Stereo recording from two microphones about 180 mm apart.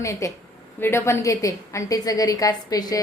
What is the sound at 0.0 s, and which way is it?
A woman's voice, 15° left (ahead or behind).